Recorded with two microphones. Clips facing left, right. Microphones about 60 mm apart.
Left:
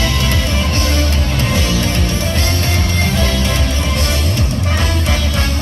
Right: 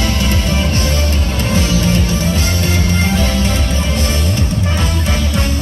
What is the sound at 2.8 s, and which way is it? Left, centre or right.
Music, right.